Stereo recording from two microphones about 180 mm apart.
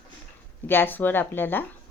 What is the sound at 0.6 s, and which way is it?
Speech, 10° left (ahead or behind).